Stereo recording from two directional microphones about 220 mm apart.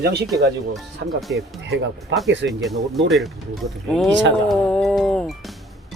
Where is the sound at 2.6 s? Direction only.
Centre (ahead or behind).